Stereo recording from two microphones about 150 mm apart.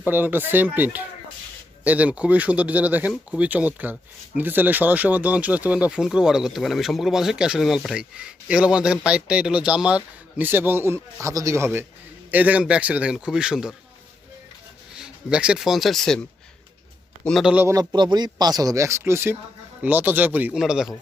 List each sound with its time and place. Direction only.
0.0 s speech: 15° right (ahead or behind)
14.9 s speech: 5° right (ahead or behind)
17.2 s a man's voice: centre (ahead or behind)
17.5 s speech: 10° right (ahead or behind)
17.7 s speech: 30° right (ahead or behind); by 20.9 s 5° right (ahead or behind)